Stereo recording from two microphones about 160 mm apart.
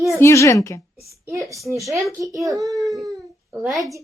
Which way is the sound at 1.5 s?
Centre (ahead or behind).